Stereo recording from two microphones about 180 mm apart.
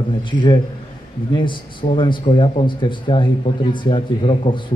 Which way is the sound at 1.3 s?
25° left (ahead or behind).